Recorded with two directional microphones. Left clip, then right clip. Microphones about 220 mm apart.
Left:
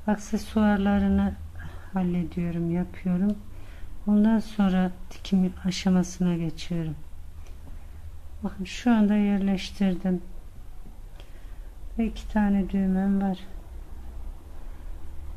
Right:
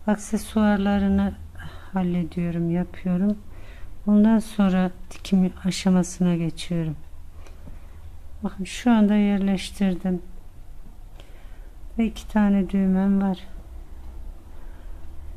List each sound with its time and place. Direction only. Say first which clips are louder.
0.0 s speech: right 3 dB; 15° right (ahead or behind)
8.4 s speech: right 3 dB; 15° right (ahead or behind)
12.0 s a woman's voice: right 4 dB; 20° right (ahead or behind)